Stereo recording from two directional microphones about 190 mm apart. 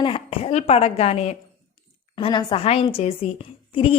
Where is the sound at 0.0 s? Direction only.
30° left (ahead or behind).